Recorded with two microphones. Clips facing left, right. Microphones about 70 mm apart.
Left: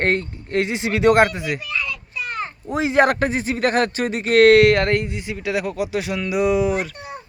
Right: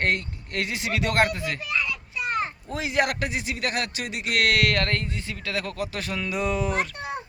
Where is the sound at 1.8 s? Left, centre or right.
Centre.